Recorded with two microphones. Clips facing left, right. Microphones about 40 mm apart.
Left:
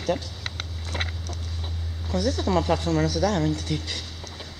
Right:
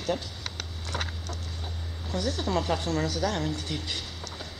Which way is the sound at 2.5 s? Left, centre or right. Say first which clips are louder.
Left 5 dB; centre.